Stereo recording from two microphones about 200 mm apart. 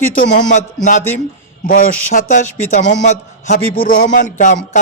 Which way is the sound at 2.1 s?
40° left (ahead or behind).